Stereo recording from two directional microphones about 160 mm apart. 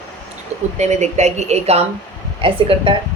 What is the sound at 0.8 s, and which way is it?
A woman's voice, 45° right (ahead or behind).